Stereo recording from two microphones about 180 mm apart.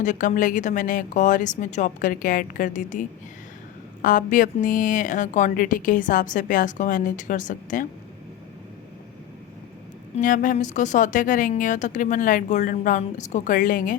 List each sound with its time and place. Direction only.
0.0 s a woman's voice: 45° left (ahead or behind)
10.2 s a woman's voice: 45° left (ahead or behind)